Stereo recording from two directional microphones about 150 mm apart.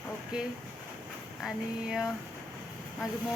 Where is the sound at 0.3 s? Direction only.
5° right (ahead or behind).